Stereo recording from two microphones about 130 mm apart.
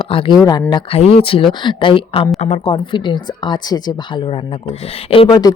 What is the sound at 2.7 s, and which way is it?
Speech, 40° left (ahead or behind).